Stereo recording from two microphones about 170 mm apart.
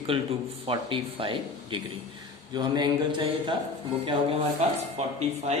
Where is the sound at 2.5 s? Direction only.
25° right (ahead or behind).